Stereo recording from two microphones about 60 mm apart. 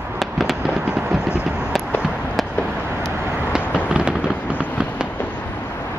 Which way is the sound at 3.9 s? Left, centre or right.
Centre.